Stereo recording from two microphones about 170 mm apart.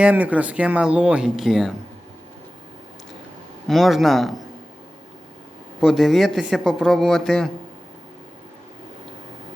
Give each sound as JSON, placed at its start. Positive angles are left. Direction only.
{"t": 0.0, "sound": "speech", "side_deg": -10}
{"t": 3.7, "sound": "a man's voice", "side_deg": 0}
{"t": 5.8, "sound": "a man's voice", "side_deg": 0}